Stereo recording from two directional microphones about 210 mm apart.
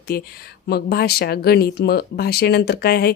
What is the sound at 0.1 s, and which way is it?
Speech, 45° left (ahead or behind).